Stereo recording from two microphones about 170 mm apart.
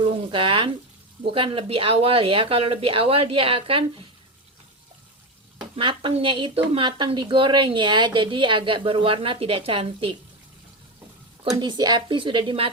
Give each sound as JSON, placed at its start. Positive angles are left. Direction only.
{"t": 0.0, "sound": "frying", "side_deg": -30}
{"t": 1.3, "sound": "speech", "side_deg": -30}
{"t": 5.7, "sound": "a woman's voice", "side_deg": -30}
{"t": 11.5, "sound": "a woman's voice", "side_deg": -25}